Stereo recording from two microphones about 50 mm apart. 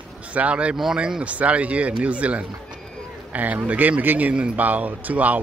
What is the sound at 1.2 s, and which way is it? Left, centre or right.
Speech, right.